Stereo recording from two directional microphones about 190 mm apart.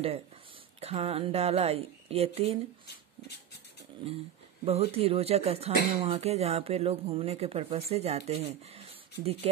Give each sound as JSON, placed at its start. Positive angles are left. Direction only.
{"t": 0.7, "sound": "speech", "side_deg": -35}
{"t": 4.6, "sound": "speech", "side_deg": -30}